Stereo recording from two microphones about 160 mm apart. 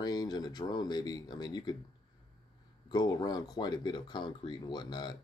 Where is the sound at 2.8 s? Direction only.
25° left (ahead or behind).